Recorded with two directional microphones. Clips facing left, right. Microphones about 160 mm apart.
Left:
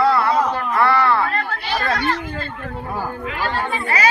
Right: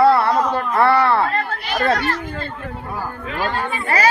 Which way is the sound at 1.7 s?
35° right (ahead or behind).